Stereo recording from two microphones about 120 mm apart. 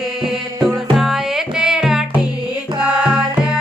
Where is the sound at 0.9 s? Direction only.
Centre (ahead or behind).